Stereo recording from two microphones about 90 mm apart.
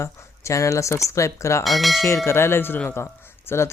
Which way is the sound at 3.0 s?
30° left (ahead or behind).